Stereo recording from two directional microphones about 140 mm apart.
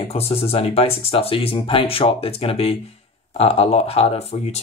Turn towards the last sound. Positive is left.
turn(degrees=50)  # may be behind; listen again after turning